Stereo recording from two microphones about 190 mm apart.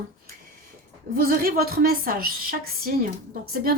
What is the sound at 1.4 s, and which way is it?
A woman's voice, 55° right (ahead or behind).